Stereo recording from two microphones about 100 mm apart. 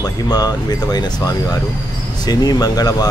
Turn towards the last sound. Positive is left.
turn(degrees=40)  # may be behind; listen again after turning